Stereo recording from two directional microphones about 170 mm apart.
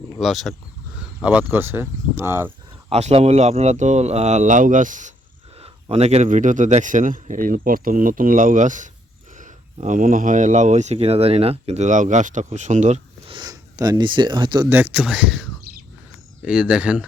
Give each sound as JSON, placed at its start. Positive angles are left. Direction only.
{"t": 0.2, "sound": "speech", "side_deg": 0}
{"t": 2.9, "sound": "speech", "side_deg": -40}
{"t": 5.5, "sound": "speech", "side_deg": -35}
{"t": 13.2, "sound": "speech", "side_deg": -25}
{"t": 14.7, "sound": "speech", "side_deg": -10}